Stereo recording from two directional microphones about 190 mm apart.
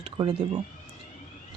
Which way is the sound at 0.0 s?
25° right (ahead or behind).